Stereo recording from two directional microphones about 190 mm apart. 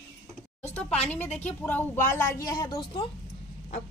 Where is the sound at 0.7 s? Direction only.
5° left (ahead or behind).